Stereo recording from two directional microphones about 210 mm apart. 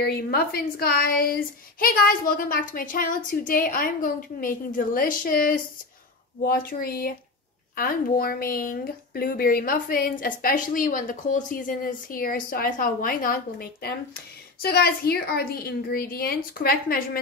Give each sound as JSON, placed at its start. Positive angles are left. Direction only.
{"t": 0.0, "sound": "a woman's voice", "side_deg": 45}